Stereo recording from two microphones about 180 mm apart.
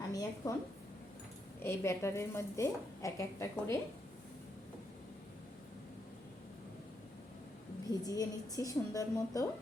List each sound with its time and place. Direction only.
0.4 s a woman's voice: 20° left (ahead or behind)
1.6 s a woman's voice: 15° left (ahead or behind)
7.9 s a woman's voice: 20° left (ahead or behind)